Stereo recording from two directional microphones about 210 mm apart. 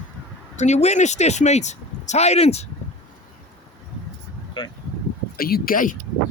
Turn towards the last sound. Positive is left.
turn(degrees=40)  # may be behind; listen again after turning